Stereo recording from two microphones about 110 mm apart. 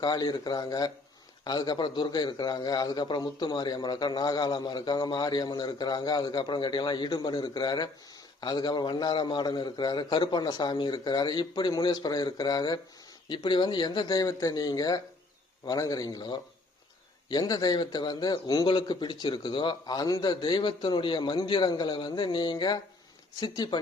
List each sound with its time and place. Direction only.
0.0 s a man's voice: 40° left (ahead or behind)